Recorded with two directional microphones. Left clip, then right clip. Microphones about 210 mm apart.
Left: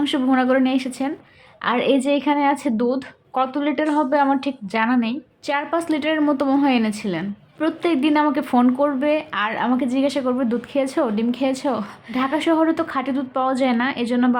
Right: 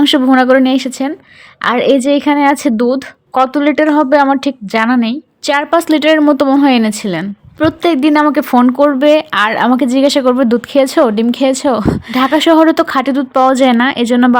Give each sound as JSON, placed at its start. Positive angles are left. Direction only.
{"t": 0.0, "sound": "a woman's voice", "side_deg": -40}